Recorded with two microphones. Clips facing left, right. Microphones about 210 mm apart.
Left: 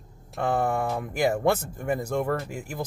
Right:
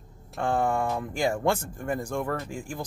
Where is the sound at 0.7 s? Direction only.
5° left (ahead or behind).